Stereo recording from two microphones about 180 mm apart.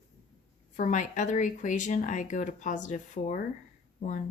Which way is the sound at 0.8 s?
45° left (ahead or behind).